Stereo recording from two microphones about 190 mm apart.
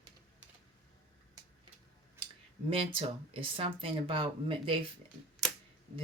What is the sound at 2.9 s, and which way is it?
Speech, 30° right (ahead or behind).